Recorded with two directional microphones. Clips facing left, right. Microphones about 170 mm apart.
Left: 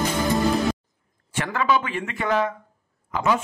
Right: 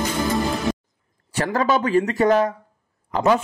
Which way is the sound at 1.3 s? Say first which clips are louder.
Right 3 dB; 35° right (ahead or behind).